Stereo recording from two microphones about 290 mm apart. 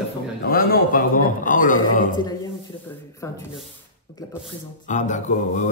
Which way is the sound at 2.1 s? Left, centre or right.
Centre.